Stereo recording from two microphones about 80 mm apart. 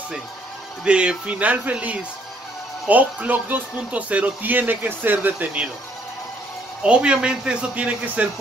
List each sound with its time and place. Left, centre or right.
0.8 s speech: centre
6.8 s speech: centre